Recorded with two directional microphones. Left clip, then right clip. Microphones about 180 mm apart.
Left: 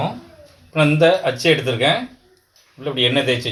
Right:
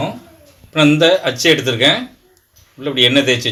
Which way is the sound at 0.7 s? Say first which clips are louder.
Right 3 dB; 45° right (ahead or behind).